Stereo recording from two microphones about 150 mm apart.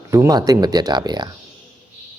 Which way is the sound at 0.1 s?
25° right (ahead or behind).